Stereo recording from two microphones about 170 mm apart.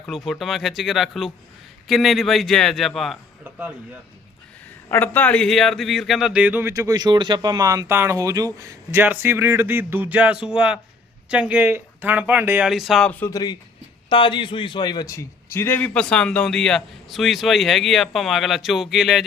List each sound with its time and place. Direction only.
0.0 s a man's voice: centre (ahead or behind)
4.9 s speech: 10° left (ahead or behind)
13.3 s a man's voice: 25° left (ahead or behind); by 19.2 s centre (ahead or behind)